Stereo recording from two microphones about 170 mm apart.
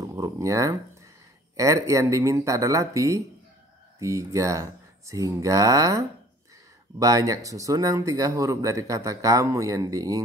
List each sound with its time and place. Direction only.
0.0 s speech: 20° right (ahead or behind)